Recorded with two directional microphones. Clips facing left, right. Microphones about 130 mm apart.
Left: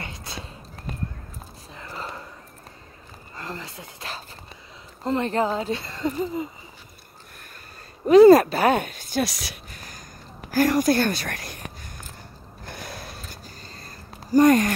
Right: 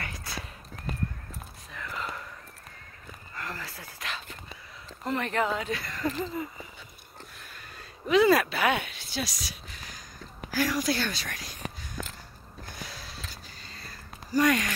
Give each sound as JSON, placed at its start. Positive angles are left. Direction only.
{"t": 0.0, "sound": "horse", "side_deg": 25}
{"t": 1.7, "sound": "whispering", "side_deg": 30}
{"t": 3.3, "sound": "a sound", "side_deg": 25}
{"t": 5.0, "sound": "speech", "side_deg": 30}
{"t": 8.1, "sound": "speech", "side_deg": 40}
{"t": 10.5, "sound": "speech", "side_deg": 50}
{"t": 12.6, "sound": "a sound", "side_deg": 55}